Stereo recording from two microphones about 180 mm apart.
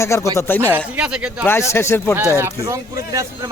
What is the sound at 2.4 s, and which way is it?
Speech, 15° right (ahead or behind).